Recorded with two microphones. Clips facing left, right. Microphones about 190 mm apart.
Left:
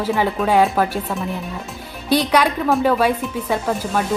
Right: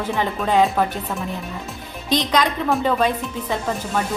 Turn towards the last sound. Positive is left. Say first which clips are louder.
# left 3 dB
turn(degrees=10)  # may be behind; listen again after turning